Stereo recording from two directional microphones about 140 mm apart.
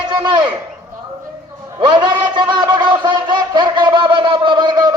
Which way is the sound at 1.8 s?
35° right (ahead or behind).